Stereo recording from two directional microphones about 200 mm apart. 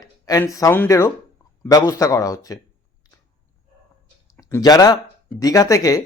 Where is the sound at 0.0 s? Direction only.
15° left (ahead or behind).